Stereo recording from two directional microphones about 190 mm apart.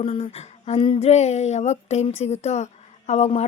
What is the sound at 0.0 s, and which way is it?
Speech, 30° left (ahead or behind).